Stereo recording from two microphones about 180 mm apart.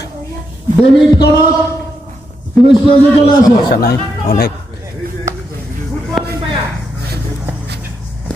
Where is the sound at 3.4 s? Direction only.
60° left (ahead or behind).